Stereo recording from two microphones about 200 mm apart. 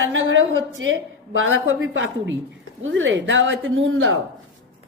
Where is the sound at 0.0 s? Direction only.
70° right (ahead or behind).